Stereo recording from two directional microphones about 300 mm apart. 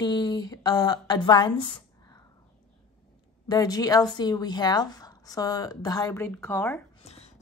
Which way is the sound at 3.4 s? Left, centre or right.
Centre.